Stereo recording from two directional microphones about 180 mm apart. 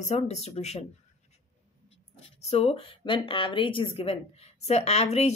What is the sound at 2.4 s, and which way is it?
Speech, 35° left (ahead or behind).